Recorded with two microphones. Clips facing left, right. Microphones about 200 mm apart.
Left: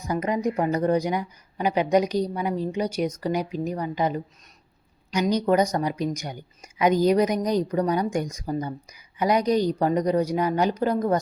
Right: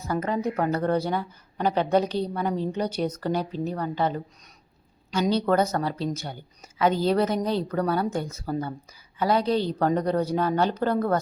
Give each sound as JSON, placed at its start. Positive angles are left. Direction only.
{"t": 0.0, "sound": "a woman's voice", "side_deg": 15}
{"t": 5.3, "sound": "a woman's voice", "side_deg": 15}